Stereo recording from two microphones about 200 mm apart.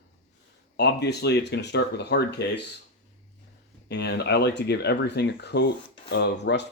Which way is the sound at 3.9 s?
55° left (ahead or behind).